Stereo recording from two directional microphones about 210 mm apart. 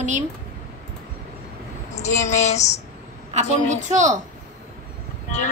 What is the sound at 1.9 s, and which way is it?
Speech, 35° left (ahead or behind).